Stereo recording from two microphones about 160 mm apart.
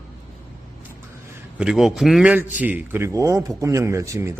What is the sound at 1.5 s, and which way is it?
A man's voice, 5° right (ahead or behind).